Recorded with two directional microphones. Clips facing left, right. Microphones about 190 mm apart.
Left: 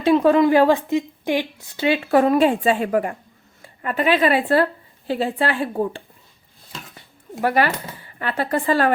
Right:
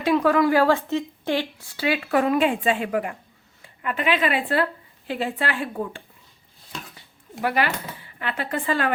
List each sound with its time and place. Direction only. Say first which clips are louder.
0.0 s a woman's voice: left 4 dB; 25° left (ahead or behind)
7.4 s a woman's voice: left 4 dB; 40° left (ahead or behind)